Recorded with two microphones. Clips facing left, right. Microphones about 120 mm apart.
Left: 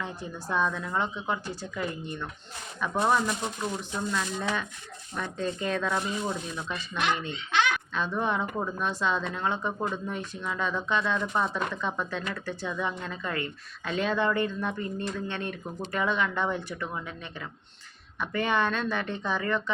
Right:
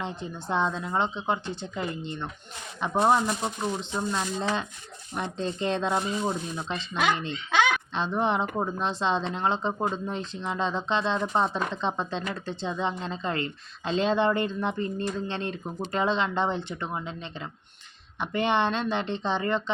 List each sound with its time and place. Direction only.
0.0 s speech: 25° right (ahead or behind)